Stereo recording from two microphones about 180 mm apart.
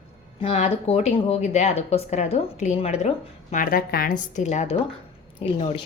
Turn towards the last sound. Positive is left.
turn(degrees=30)  # may be behind; listen again after turning